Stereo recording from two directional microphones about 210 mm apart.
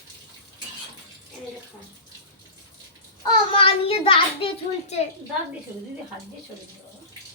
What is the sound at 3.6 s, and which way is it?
A child's voice, 25° left (ahead or behind).